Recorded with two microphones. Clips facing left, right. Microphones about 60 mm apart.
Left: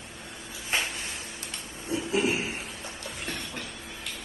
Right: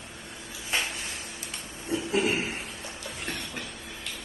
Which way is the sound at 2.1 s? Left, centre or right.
Right.